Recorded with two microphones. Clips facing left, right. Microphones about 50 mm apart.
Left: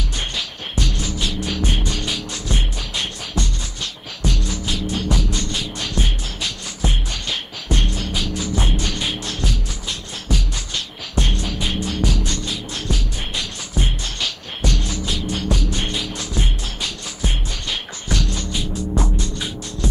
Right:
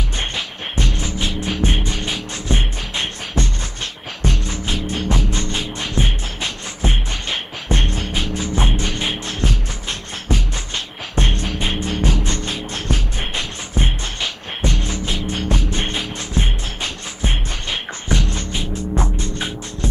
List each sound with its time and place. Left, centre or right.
0.2 s music: right